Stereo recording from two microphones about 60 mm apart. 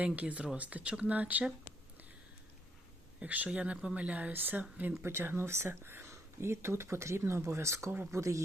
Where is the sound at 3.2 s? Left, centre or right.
Right.